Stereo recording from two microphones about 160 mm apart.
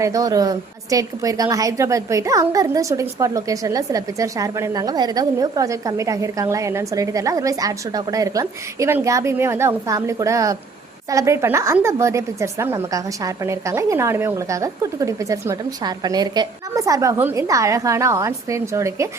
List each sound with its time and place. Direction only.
0.0 s a woman's voice: 20° right (ahead or behind)